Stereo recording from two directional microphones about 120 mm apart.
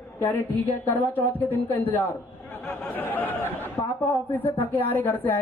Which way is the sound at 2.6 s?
15° left (ahead or behind).